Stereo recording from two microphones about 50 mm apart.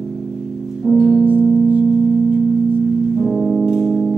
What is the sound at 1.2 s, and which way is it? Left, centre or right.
Music, right.